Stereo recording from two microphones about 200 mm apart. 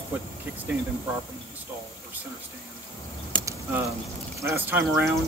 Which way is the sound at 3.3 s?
15° right (ahead or behind).